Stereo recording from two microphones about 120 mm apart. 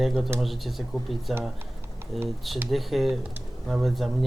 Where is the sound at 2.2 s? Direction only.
Centre (ahead or behind).